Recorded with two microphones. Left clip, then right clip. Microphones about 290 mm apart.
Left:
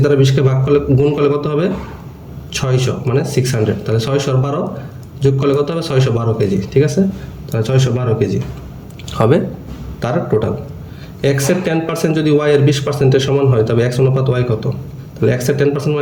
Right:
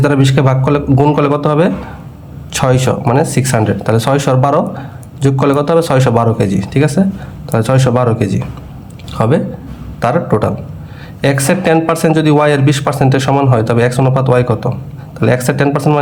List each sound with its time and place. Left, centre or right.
0.0 s a man's voice: centre